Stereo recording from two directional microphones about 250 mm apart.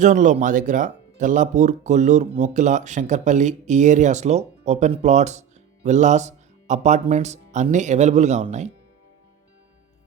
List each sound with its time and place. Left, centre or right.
0.0 s speech: right